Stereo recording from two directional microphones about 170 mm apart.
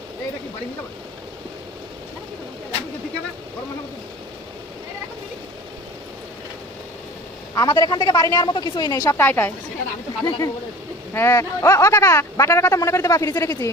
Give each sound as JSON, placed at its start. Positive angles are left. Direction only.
{"t": 7.5, "sound": "a woman's voice", "side_deg": 25}